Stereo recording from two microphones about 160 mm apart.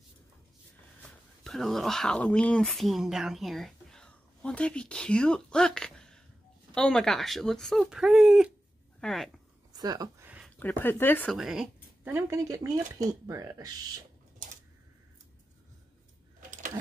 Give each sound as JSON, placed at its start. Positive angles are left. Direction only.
{"t": 1.0, "sound": "speech", "side_deg": 0}
{"t": 9.7, "sound": "a sound", "side_deg": -25}
{"t": 10.6, "sound": "speech", "side_deg": 10}
{"t": 11.3, "sound": "speech", "side_deg": -5}